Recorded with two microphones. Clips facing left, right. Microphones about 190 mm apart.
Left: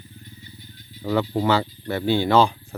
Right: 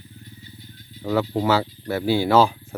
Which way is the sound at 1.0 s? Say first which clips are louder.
Even; centre (ahead or behind).